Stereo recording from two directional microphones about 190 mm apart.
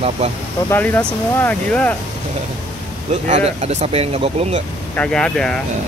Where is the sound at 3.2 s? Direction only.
35° right (ahead or behind).